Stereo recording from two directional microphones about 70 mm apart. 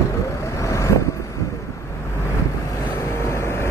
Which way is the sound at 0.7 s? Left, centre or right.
Left.